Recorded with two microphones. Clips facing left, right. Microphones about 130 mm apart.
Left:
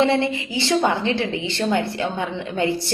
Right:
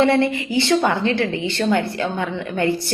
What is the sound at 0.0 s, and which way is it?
A woman's voice, 20° left (ahead or behind).